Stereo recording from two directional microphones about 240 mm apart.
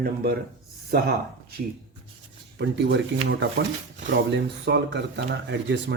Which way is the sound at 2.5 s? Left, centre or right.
Right.